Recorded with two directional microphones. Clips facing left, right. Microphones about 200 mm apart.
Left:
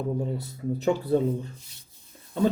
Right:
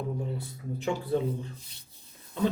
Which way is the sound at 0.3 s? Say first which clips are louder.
Left 7 dB; 40° left (ahead or behind).